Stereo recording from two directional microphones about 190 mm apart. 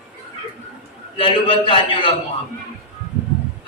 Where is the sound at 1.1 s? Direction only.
30° left (ahead or behind).